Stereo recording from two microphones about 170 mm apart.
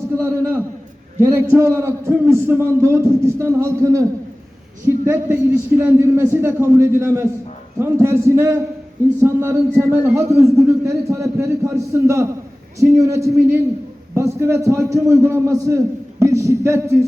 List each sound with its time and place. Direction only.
0.2 s a man's voice: 15° right (ahead or behind)